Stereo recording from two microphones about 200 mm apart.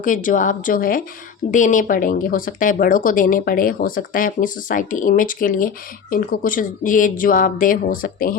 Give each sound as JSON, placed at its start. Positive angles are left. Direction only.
{"t": 0.0, "sound": "a woman's voice", "side_deg": 40}